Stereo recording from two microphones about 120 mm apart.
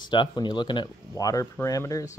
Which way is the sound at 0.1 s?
40° left (ahead or behind).